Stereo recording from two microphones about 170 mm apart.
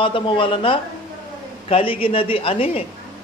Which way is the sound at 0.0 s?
30° left (ahead or behind).